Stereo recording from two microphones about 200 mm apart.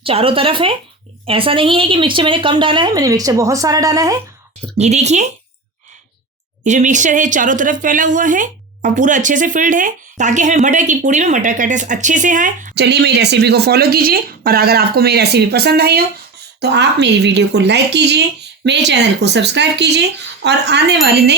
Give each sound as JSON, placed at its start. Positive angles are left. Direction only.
{"t": 0.0, "sound": "a woman's voice", "side_deg": -25}
{"t": 4.8, "sound": "a woman's voice", "side_deg": -35}
{"t": 6.7, "sound": "a woman's voice", "side_deg": -40}
{"t": 12.7, "sound": "speech", "side_deg": -55}